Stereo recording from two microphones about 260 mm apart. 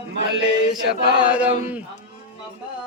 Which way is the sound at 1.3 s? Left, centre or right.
Centre.